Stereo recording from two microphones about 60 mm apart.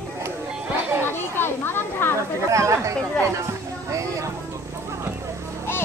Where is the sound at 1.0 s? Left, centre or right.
Left.